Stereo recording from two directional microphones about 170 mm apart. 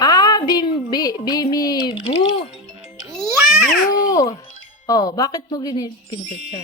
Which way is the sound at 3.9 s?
20° left (ahead or behind).